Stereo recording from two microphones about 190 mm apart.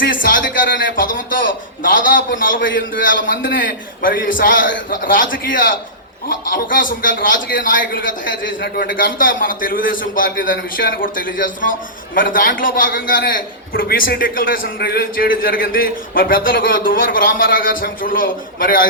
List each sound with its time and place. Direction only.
0.1 s a man's voice: 45° left (ahead or behind)